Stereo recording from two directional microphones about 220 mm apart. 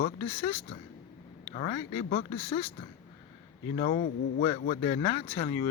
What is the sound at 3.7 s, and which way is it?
Speech, 35° left (ahead or behind).